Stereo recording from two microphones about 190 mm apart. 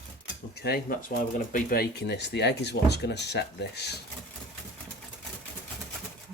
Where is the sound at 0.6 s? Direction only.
55° left (ahead or behind).